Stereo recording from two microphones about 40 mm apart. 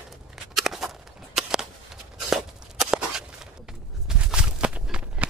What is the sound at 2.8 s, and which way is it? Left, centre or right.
Walk, right.